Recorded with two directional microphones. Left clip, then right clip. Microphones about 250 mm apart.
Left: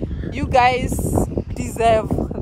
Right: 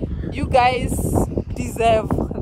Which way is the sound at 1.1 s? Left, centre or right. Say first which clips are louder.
Even; right.